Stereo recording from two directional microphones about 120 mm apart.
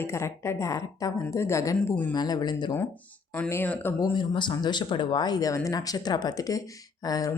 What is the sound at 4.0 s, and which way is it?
Speech, 40° left (ahead or behind).